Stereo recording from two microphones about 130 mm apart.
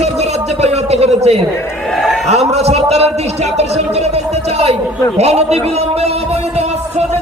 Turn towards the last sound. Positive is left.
turn(degrees=-55)  # may be behind; listen again after turning